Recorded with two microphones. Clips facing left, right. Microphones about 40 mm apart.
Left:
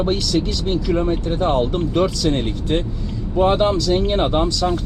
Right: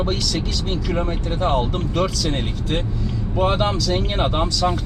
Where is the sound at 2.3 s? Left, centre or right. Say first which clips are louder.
Left 4 dB; centre.